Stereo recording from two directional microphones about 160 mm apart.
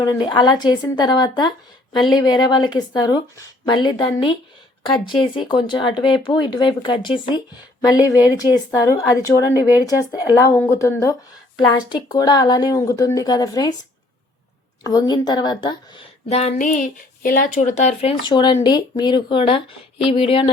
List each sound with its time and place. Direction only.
0.0 s a woman's voice: 25° left (ahead or behind)
9.6 s speech: 10° right (ahead or behind)
10.3 s a woman's voice: 20° left (ahead or behind)
14.8 s a woman's voice: 25° left (ahead or behind)
16.3 s speech: 45° left (ahead or behind)